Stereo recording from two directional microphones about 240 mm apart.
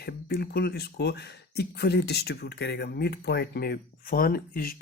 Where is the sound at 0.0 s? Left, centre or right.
Left.